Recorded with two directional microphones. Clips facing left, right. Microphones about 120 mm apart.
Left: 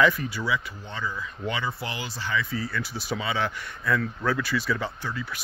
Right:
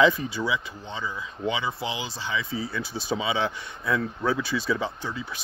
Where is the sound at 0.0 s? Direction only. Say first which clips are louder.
Right 2 dB; 20° right (ahead or behind).